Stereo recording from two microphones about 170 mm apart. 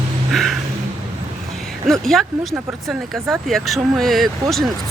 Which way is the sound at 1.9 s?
Centre (ahead or behind).